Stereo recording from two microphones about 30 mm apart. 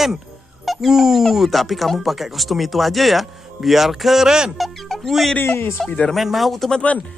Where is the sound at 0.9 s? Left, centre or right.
Centre.